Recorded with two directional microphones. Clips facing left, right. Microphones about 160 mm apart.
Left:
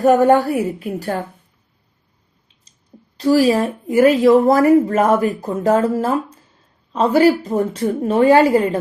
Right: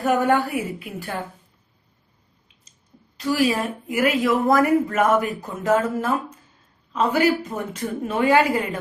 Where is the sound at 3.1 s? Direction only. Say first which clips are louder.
Left 7 dB; 35° left (ahead or behind).